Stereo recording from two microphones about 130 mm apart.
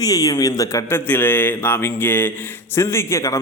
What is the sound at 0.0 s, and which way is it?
A man's voice, 30° left (ahead or behind).